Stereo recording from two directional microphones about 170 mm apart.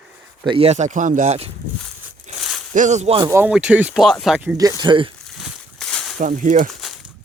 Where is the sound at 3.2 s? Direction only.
15° right (ahead or behind).